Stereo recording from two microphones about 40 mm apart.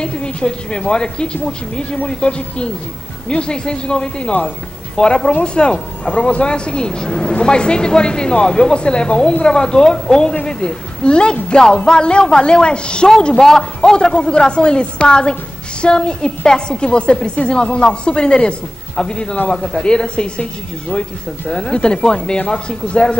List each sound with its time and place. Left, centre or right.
0.0 s a woman's voice: left
6.0 s speech: left
6.4 s a woman's voice: left
13.4 s a man's voice: centre
21.5 s a woman's voice: left